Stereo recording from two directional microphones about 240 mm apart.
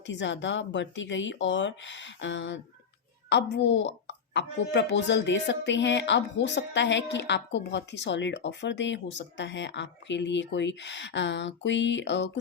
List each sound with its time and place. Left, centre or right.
0.0 s a child's voice: left